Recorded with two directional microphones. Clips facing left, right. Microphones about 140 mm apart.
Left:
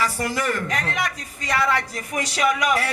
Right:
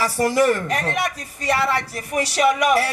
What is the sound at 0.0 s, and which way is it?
Speech, 35° right (ahead or behind).